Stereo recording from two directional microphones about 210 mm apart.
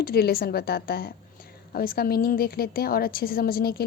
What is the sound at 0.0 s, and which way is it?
A woman's voice, 45° left (ahead or behind).